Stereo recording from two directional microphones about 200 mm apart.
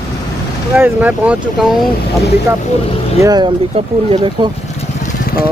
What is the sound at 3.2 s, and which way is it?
Speech, 20° right (ahead or behind).